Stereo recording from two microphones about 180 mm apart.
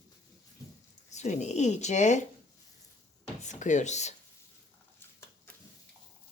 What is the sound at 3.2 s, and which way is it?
Speech, 40° left (ahead or behind).